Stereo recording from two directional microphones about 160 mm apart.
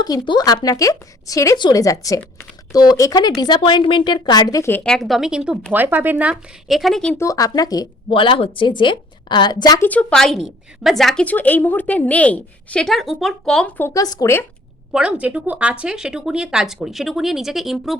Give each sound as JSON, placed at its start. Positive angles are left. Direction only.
{"t": 0.0, "sound": "speech", "side_deg": 25}
{"t": 6.3, "sound": "speech", "side_deg": 0}
{"t": 7.2, "sound": "speech", "side_deg": 20}
{"t": 9.8, "sound": "a woman's voice", "side_deg": 10}
{"t": 14.9, "sound": "speech", "side_deg": -5}